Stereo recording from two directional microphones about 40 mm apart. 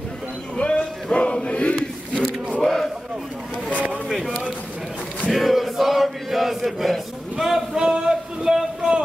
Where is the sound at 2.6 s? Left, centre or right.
Centre.